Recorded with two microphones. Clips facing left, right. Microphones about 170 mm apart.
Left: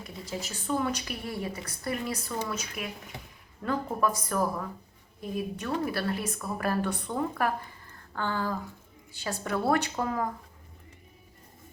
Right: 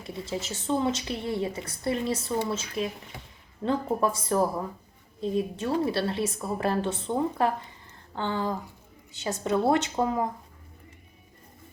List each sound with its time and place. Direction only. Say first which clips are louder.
0.0 s a woman's voice: right 4 dB; 25° right (ahead or behind)